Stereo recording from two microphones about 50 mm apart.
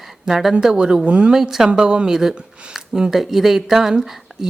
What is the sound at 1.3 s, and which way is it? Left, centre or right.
Speech, centre.